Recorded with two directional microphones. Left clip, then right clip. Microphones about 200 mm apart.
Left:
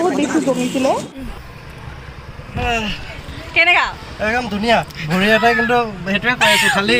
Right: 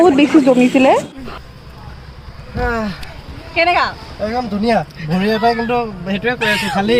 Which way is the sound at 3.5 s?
5° left (ahead or behind).